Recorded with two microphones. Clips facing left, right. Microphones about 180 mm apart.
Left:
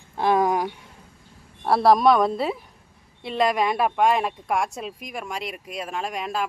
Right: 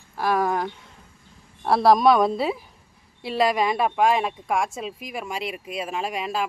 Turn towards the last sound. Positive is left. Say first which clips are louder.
# right 1 dB
turn(degrees=-5)  # may be behind; listen again after turning